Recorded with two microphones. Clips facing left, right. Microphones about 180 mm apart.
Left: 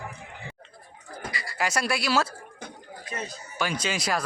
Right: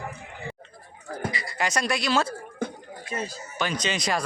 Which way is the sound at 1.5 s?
5° left (ahead or behind).